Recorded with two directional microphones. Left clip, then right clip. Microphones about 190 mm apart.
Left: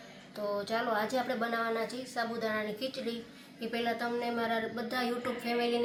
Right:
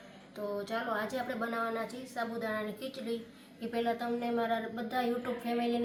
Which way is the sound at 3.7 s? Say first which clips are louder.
Even; 30° left (ahead or behind).